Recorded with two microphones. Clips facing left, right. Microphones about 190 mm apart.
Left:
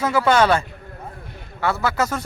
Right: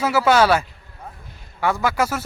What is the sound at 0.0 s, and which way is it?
Speech, 5° right (ahead or behind).